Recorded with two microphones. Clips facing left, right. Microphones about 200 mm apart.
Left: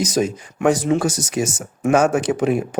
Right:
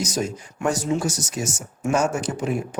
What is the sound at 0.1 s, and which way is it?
A man's voice, 90° left.